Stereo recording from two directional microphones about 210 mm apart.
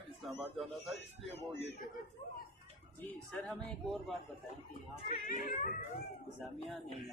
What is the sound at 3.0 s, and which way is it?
Speech, 5° left (ahead or behind).